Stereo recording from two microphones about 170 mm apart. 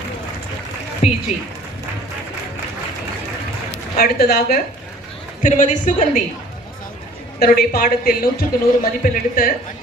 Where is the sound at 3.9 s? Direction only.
65° left (ahead or behind).